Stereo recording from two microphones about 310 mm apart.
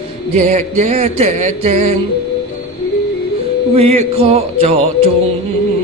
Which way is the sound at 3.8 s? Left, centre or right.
Centre.